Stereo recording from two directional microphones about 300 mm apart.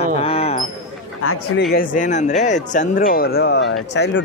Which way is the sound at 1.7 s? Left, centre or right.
Left.